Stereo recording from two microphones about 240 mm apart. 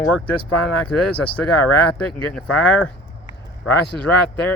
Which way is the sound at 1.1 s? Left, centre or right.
Centre.